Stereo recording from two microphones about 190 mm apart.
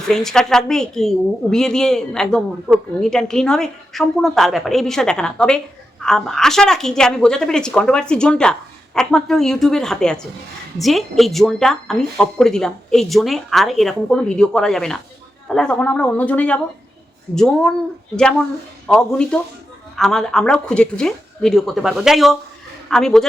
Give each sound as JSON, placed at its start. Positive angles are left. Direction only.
{"t": 0.1, "sound": "a woman's voice", "side_deg": 0}